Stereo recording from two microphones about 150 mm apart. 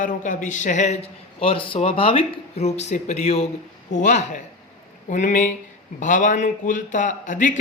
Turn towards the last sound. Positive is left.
turn(degrees=55)  # may be behind; listen again after turning